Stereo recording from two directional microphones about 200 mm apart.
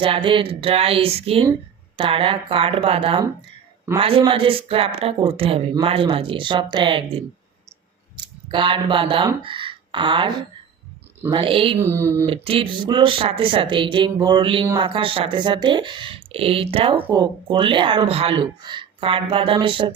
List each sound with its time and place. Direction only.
0.0 s speech: 25° right (ahead or behind)
11.8 s speech: 15° right (ahead or behind)
12.2 s speech: 25° right (ahead or behind)